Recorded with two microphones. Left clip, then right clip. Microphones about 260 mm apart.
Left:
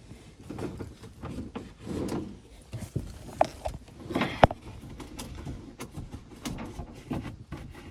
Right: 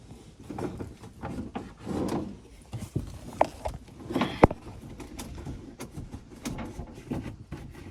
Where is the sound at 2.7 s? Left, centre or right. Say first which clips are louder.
Right 2 dB; centre.